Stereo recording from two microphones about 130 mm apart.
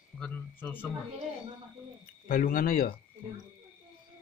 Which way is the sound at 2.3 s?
90° left.